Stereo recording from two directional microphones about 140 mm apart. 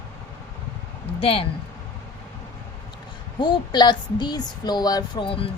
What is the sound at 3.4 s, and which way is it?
Speech, 30° left (ahead or behind).